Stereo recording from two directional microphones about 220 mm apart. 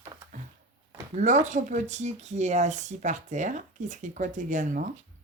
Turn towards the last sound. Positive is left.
turn(degrees=-35)  # may be behind; listen again after turning